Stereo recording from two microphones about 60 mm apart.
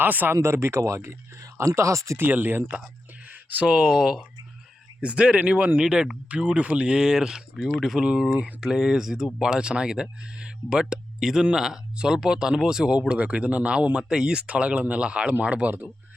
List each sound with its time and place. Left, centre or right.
0.0 s speech: right
0.3 s speech: right
2.1 s speech: right
3.7 s speech: centre